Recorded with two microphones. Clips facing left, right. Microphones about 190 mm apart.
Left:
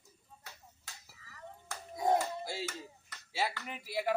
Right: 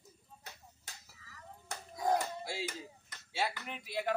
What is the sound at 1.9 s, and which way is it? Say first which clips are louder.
Music: left 2 dB; 25° left (ahead or behind).